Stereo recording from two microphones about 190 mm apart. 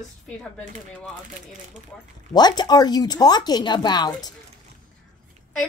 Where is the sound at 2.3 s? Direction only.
20° left (ahead or behind).